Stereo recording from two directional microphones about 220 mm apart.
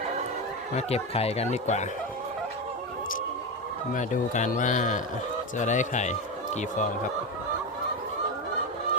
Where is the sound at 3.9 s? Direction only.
35° left (ahead or behind).